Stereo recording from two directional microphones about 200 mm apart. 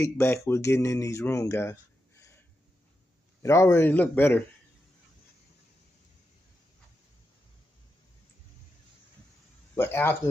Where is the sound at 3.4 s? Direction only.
15° left (ahead or behind).